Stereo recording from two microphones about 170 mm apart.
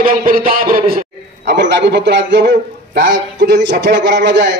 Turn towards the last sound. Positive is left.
turn(degrees=-90)